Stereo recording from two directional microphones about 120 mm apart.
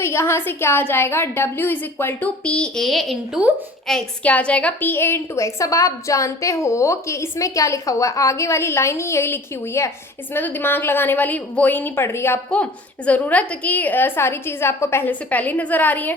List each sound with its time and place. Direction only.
0.0 s a woman's voice: 20° left (ahead or behind)